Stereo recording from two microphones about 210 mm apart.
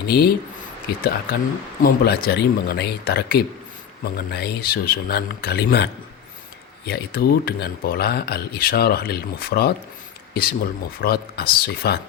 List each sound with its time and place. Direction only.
0.0 s speech: 50° left (ahead or behind)
1.8 s speech: 50° left (ahead or behind)